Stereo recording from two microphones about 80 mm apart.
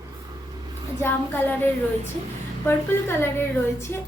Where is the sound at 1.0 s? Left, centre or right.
Left.